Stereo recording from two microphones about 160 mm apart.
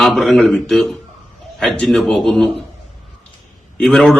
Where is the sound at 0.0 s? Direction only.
Centre (ahead or behind).